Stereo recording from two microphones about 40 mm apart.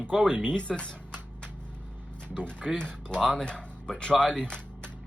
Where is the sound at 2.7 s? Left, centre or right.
Left.